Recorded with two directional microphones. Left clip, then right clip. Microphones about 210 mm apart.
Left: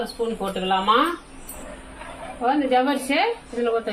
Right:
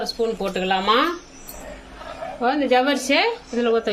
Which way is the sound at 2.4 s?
40° right (ahead or behind).